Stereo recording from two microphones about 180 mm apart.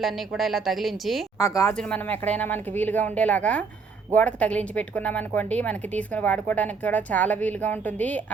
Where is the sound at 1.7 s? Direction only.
5° left (ahead or behind).